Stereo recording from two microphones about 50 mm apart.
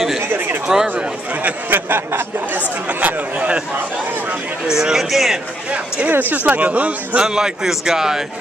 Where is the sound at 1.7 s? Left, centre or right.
Right.